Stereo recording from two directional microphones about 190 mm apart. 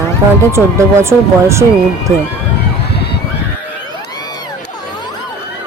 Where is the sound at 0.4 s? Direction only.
15° right (ahead or behind).